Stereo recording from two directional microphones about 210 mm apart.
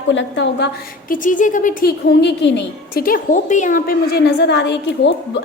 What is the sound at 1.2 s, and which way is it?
A woman's voice, 40° left (ahead or behind).